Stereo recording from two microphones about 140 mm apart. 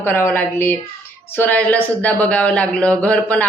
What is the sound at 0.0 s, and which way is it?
Speech, 15° left (ahead or behind).